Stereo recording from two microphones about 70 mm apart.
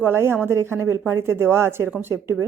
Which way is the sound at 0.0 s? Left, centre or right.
Right.